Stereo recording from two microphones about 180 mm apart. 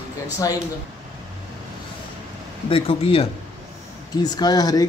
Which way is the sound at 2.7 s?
30° left (ahead or behind).